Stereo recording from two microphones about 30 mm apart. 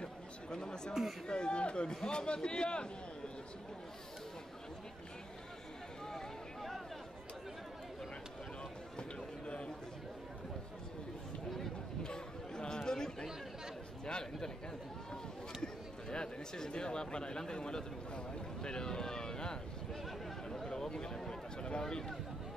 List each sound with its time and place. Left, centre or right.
0.0 s chatter: left
1.2 s a man's voice: left
12.0 s chatter: left
14.0 s speech: left
15.6 s speech: left
20.4 s a sound: left
21.5 s speech: left